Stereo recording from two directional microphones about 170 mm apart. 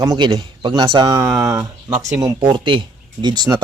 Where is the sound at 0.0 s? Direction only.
20° right (ahead or behind).